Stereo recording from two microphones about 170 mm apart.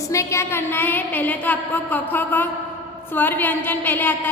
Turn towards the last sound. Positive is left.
turn(degrees=10)  # may be behind; listen again after turning